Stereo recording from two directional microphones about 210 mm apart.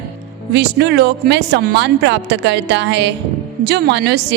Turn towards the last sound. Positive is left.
turn(degrees=-50)  # may be behind; listen again after turning